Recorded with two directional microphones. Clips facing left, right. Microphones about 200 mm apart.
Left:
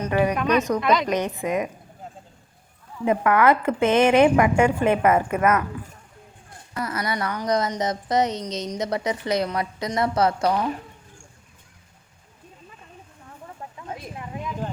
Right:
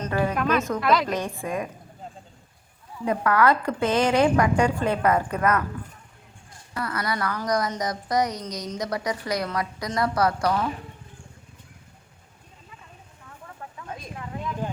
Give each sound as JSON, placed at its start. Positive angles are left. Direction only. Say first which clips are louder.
{"t": 0.0, "sound": "a sound", "louder": "left 4 dB", "side_deg": 15}
{"t": 0.3, "sound": "a woman's voice", "louder": "left 3 dB", "side_deg": 0}
{"t": 1.0, "sound": "a woman's voice", "louder": "left 4 dB", "side_deg": 20}
{"t": 3.0, "sound": "a woman's voice", "louder": "left 2 dB", "side_deg": 20}
{"t": 6.7, "sound": "a woman's voice", "louder": "left 1 dB", "side_deg": 25}
{"t": 13.7, "sound": "a sound", "louder": "left 2 dB", "side_deg": 20}